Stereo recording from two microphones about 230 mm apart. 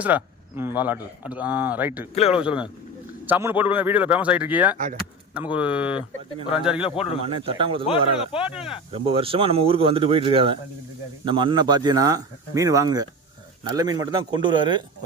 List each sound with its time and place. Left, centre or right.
0.0 s speech: centre
6.0 s speech: left
6.6 s speech: centre
7.3 s speech: right
7.9 s speech: left
8.9 s speech: right